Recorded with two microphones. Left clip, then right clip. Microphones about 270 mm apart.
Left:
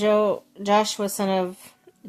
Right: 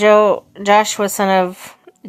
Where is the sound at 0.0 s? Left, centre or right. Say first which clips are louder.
Right 10 dB; centre.